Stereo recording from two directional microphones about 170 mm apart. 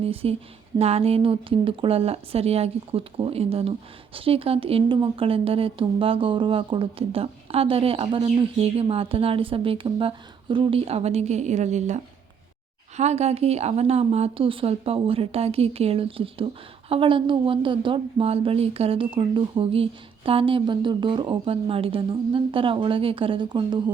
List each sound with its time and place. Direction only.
0.0 s speech: 35° right (ahead or behind)
13.0 s speech: 40° right (ahead or behind)